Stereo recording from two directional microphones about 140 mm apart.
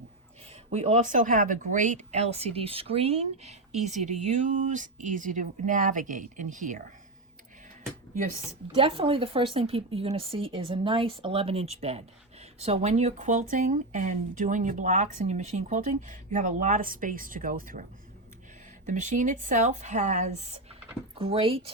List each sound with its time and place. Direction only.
0.7 s speech: 50° right (ahead or behind); by 6.8 s 70° right (ahead or behind)
8.7 s speech: 40° right (ahead or behind); by 17.8 s 75° right (ahead or behind)
18.9 s speech: 65° right (ahead or behind)
21.2 s speech: 40° right (ahead or behind)